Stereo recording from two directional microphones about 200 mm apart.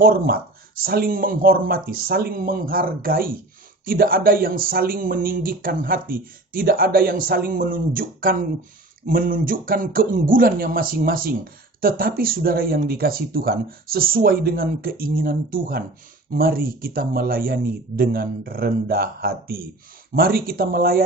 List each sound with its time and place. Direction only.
0.8 s speech: 50° right (ahead or behind)